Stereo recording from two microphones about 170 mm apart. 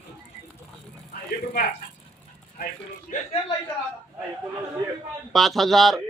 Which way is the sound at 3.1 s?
50° left (ahead or behind).